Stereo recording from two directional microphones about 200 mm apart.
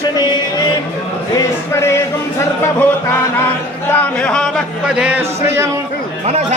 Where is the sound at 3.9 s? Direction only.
5° left (ahead or behind); by 5.7 s 10° right (ahead or behind).